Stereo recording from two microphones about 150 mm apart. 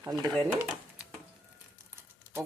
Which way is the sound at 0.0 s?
25° right (ahead or behind).